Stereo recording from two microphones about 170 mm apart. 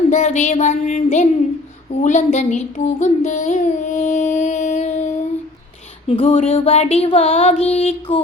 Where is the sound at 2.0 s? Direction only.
45° left (ahead or behind).